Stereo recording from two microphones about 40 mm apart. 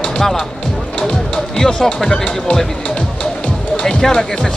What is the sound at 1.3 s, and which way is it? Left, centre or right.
Speech, centre.